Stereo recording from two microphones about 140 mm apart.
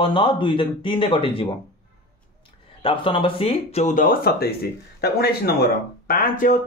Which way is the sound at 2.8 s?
40° left (ahead or behind).